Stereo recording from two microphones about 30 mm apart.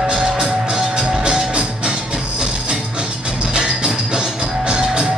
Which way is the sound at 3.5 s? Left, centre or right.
Right.